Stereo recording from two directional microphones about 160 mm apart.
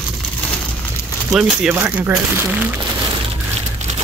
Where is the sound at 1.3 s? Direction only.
10° right (ahead or behind).